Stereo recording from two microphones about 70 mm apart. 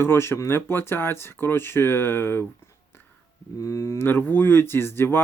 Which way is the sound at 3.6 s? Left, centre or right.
Left.